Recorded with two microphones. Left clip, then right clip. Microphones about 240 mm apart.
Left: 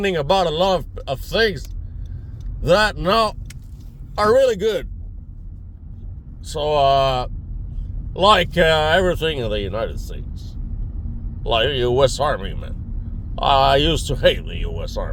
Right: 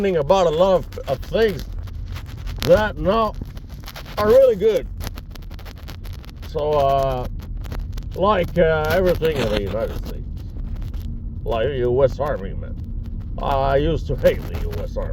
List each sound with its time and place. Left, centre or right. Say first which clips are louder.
0.0 s speech: right 1 dB; centre
2.6 s speech: even; left
6.5 s speech: left 2 dB; left
11.4 s speech: left 2 dB; left